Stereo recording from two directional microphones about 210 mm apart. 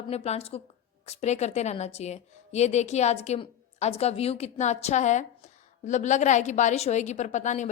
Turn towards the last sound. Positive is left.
turn(degrees=35)  # may be behind; listen again after turning